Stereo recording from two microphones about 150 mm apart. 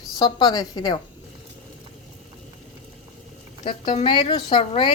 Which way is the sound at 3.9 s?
35° left (ahead or behind).